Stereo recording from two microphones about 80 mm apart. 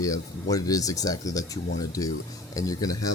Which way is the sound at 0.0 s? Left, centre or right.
Left.